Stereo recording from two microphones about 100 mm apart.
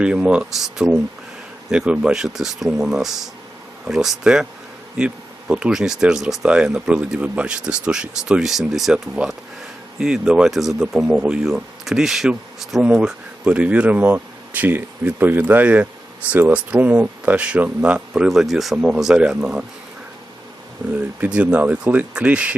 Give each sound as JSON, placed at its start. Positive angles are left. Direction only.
{"t": 0.0, "sound": "speech", "side_deg": -10}
{"t": 21.2, "sound": "speech", "side_deg": -10}